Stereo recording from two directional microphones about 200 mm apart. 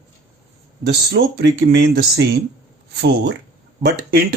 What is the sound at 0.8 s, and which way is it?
Speech, 55° right (ahead or behind).